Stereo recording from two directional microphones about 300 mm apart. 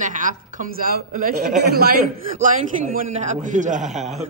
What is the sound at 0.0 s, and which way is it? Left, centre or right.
A man's voice, right.